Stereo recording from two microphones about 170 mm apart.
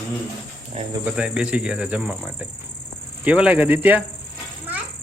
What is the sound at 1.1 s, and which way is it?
Speech, 5° right (ahead or behind).